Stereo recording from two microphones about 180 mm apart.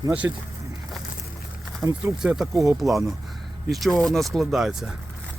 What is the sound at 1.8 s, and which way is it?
Speech, 15° right (ahead or behind).